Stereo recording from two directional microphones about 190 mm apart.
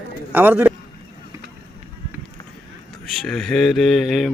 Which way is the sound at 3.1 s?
Centre (ahead or behind).